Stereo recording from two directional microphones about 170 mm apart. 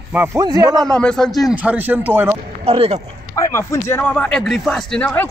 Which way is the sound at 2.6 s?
35° right (ahead or behind).